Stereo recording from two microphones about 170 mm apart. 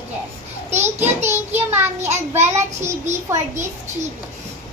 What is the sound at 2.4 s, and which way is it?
Speech, 15° right (ahead or behind).